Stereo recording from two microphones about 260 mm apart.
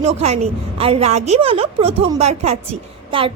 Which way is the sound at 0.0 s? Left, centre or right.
Right.